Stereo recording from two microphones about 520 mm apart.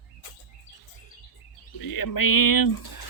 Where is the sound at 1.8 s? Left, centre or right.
Left.